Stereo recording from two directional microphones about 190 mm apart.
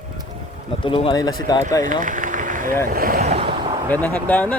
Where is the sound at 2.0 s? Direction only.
45° right (ahead or behind).